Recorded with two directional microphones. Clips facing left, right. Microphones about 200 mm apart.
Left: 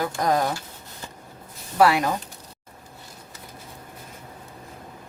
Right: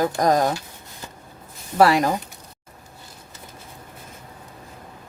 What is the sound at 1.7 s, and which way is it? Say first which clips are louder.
Speech: right 2 dB; 40° right (ahead or behind).